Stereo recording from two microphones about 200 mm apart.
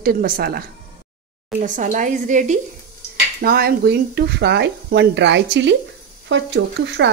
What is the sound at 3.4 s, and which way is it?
Speech, 50° right (ahead or behind).